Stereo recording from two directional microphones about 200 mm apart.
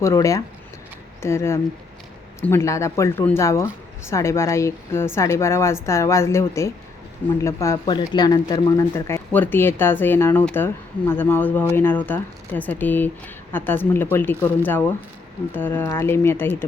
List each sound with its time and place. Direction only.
0.0 s speech: 15° left (ahead or behind)
7.4 s speech: 15° left (ahead or behind)